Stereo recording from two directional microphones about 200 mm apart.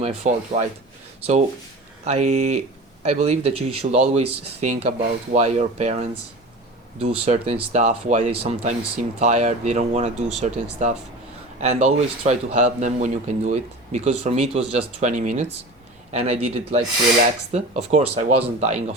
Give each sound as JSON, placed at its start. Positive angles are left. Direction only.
{"t": 0.0, "sound": "a man's voice", "side_deg": -30}
{"t": 2.0, "sound": "a man's voice", "side_deg": -35}
{"t": 7.3, "sound": "a man's voice", "side_deg": -30}